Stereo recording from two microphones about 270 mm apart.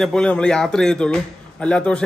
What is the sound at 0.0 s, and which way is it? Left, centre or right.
A man's voice, centre.